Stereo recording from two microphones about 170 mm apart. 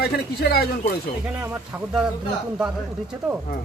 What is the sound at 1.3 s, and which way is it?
Speech, 10° right (ahead or behind).